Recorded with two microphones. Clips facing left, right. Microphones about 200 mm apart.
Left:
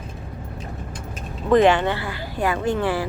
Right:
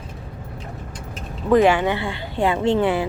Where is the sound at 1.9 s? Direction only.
25° right (ahead or behind).